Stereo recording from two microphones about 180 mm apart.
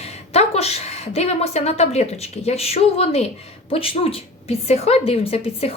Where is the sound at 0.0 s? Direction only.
35° left (ahead or behind).